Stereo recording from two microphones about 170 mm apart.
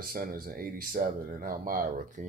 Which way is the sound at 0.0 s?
55° right (ahead or behind).